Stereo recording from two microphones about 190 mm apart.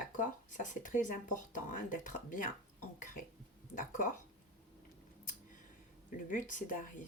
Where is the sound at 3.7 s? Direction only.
45° left (ahead or behind).